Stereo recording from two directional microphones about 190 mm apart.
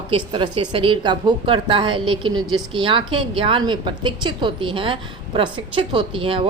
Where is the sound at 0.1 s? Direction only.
25° right (ahead or behind).